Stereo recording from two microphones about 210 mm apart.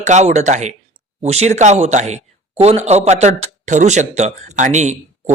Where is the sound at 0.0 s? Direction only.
35° right (ahead or behind).